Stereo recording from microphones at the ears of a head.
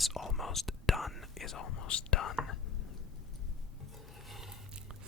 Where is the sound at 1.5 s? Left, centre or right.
Left.